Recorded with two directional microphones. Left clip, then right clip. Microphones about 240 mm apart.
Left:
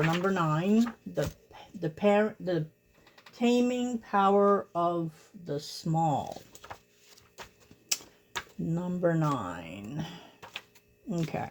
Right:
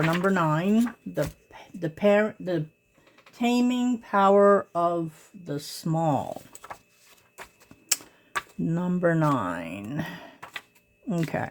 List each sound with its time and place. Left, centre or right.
0.1 s speech: right
8.6 s speech: right